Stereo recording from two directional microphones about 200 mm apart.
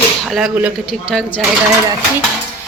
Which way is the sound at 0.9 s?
5° left (ahead or behind).